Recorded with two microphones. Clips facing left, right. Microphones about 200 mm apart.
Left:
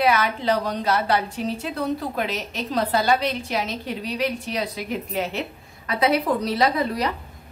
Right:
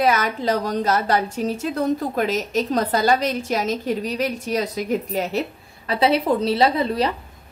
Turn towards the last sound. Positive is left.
turn(degrees=-30)  # may be behind; listen again after turning